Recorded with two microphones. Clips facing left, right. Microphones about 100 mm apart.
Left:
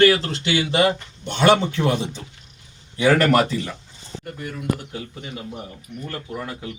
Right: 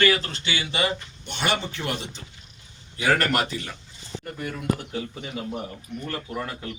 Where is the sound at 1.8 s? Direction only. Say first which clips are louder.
Left 9 dB; 75° left (ahead or behind).